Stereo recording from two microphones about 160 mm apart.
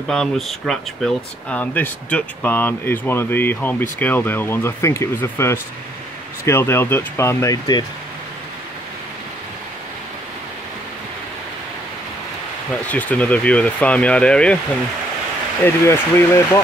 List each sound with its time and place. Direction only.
0.1 s speech: centre (ahead or behind); by 7.8 s 25° left (ahead or behind)
12.8 s speech: 10° left (ahead or behind)
15.6 s speech: 15° left (ahead or behind)